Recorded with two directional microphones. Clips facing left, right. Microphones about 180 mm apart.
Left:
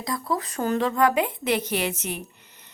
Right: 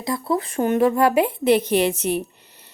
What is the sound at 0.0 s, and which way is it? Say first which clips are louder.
Speech: right 5 dB; 30° right (ahead or behind).